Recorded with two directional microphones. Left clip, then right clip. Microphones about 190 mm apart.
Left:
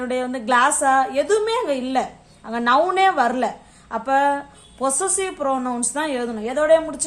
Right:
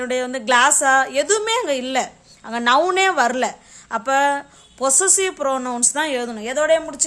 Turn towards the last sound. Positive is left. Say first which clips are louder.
# left 1 dB
turn(degrees=-40)  # may be behind; listen again after turning